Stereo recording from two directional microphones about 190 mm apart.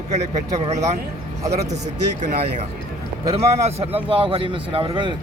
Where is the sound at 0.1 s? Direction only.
35° right (ahead or behind).